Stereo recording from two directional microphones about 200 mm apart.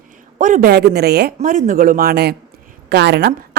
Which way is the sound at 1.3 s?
35° right (ahead or behind).